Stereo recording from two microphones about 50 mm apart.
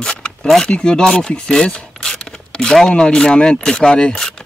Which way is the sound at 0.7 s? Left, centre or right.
Centre.